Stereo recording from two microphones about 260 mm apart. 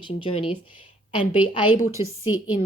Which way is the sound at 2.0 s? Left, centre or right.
Centre.